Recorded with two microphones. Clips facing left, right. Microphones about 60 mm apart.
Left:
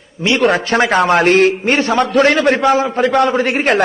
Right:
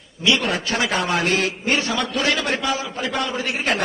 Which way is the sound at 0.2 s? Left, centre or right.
Left.